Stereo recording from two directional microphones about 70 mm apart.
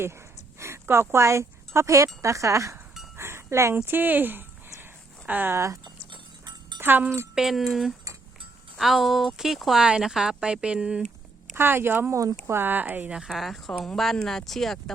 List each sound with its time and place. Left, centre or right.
0.6 s speech: right
3.2 s a sound: right
3.8 s speech: right
4.8 s a sound: right
5.5 s speech: right
6.4 s a sound: right
6.7 s speech: right
7.3 s speech: centre
11.5 s speech: right
12.1 s speech: right
12.5 s speech: right
13.1 s speech: centre